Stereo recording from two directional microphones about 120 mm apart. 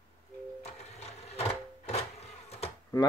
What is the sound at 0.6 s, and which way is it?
Printer, 60° left (ahead or behind).